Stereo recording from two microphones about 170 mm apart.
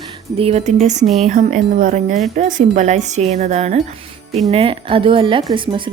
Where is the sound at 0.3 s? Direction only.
35° right (ahead or behind).